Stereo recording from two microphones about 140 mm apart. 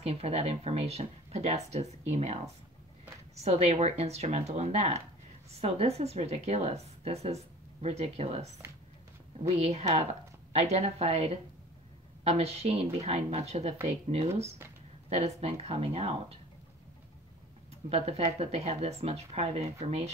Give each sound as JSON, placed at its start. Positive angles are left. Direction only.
{"t": 0.0, "sound": "a woman's voice", "side_deg": -45}
{"t": 9.6, "sound": "a woman's voice", "side_deg": -50}
{"t": 15.0, "sound": "a woman's voice", "side_deg": -50}
{"t": 17.8, "sound": "a woman's voice", "side_deg": -45}